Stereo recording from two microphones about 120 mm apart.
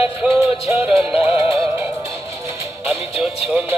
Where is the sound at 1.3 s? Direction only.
15° right (ahead or behind).